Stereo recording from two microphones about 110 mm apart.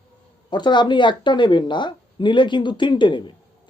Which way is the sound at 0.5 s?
45° left (ahead or behind).